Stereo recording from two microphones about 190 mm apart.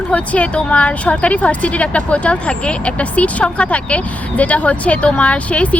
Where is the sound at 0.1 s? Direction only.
5° left (ahead or behind).